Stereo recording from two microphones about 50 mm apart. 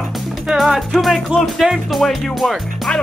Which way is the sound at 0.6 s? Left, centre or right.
Centre.